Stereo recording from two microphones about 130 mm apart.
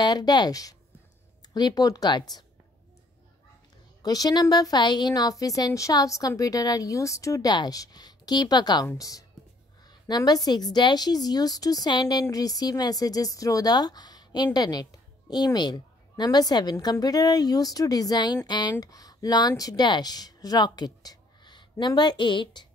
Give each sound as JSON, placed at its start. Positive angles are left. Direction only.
{"t": 0.0, "sound": "a woman's voice", "side_deg": 30}
{"t": 4.0, "sound": "a woman's voice", "side_deg": 30}